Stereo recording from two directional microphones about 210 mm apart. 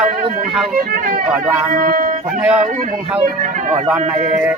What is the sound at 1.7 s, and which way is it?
Speech, 40° right (ahead or behind).